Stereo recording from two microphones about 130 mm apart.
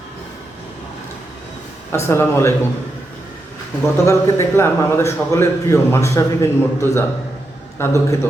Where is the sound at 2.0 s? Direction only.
20° left (ahead or behind).